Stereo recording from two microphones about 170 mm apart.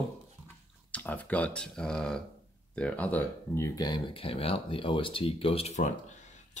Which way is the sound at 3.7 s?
25° left (ahead or behind).